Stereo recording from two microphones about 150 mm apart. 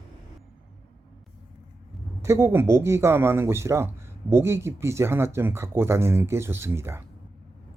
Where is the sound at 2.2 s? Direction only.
15° right (ahead or behind).